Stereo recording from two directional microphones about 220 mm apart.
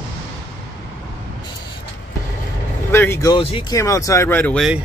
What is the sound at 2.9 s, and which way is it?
Speech, 10° left (ahead or behind).